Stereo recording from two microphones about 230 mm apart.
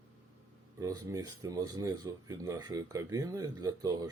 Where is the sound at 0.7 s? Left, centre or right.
Centre.